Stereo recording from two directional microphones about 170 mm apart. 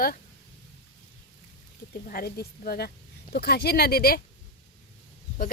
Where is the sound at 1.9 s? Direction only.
60° left (ahead or behind).